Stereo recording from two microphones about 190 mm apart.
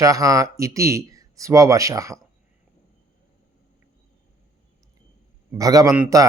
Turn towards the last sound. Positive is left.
turn(degrees=-10)  # may be behind; listen again after turning